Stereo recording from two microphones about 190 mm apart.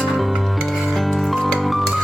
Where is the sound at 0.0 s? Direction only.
Centre (ahead or behind).